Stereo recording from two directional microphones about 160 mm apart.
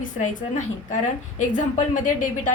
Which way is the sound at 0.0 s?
55° left (ahead or behind).